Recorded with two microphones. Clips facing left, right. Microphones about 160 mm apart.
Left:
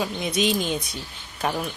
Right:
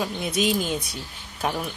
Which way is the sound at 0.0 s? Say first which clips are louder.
Left 1 dB; 5° right (ahead or behind).